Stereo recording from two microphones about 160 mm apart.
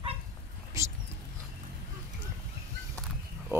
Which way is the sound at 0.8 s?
20° right (ahead or behind).